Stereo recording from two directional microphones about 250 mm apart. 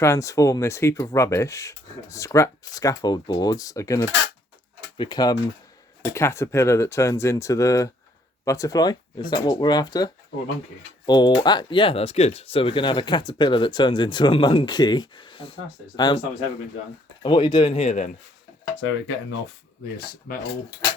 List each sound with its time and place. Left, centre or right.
0.0 s speech: centre
17.2 s speech: centre
18.6 s speech: left
20.0 s speech: left